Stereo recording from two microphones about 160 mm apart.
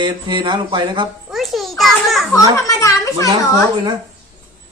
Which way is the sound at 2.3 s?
20° left (ahead or behind).